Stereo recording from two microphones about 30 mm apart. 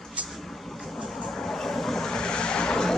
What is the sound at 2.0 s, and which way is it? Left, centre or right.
Vehicle, left.